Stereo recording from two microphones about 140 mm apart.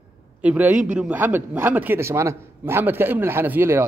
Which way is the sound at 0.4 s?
10° right (ahead or behind).